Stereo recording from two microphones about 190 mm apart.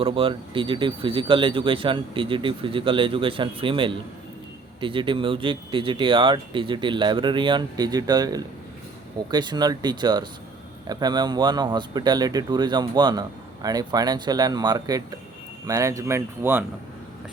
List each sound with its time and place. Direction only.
0.0 s speech: 30° right (ahead or behind); by 16.6 s 10° right (ahead or behind)